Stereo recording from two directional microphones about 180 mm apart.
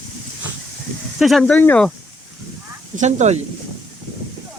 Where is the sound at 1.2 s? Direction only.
Centre (ahead or behind).